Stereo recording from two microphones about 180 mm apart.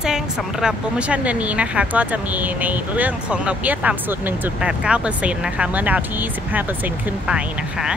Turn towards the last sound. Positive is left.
turn(degrees=-5)  # may be behind; listen again after turning